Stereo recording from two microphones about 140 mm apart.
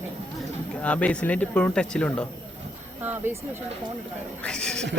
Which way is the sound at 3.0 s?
15° right (ahead or behind).